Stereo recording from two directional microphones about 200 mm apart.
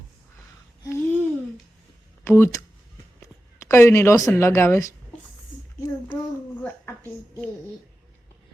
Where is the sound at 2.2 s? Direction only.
10° left (ahead or behind).